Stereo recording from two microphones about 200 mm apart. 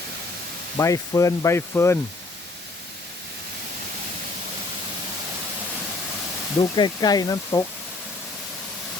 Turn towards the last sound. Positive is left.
turn(degrees=20)  # may be behind; listen again after turning